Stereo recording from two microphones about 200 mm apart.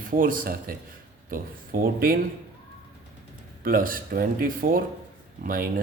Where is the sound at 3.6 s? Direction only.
45° right (ahead or behind).